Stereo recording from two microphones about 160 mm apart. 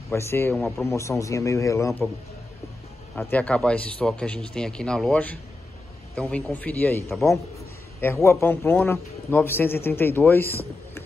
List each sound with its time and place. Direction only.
0.1 s a man's voice: 15° left (ahead or behind)
0.6 s speech: centre (ahead or behind)
0.8 s a man's voice: 20° left (ahead or behind)
3.2 s a man's voice: 10° left (ahead or behind)